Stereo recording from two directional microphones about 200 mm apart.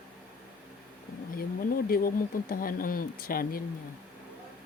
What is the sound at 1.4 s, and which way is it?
Speech, 45° left (ahead or behind).